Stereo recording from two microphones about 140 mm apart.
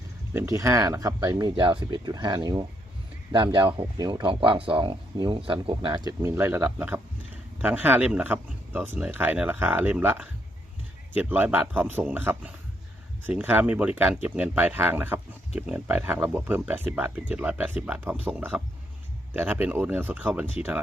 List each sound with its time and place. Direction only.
0.3 s speech: 20° right (ahead or behind)